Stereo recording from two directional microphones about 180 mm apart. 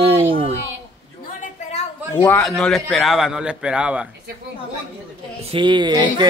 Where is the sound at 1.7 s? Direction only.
35° left (ahead or behind).